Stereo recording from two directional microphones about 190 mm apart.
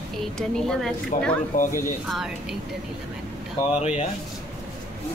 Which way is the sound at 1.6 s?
45° left (ahead or behind).